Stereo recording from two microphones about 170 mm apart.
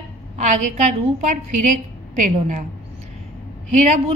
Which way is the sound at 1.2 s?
45° right (ahead or behind).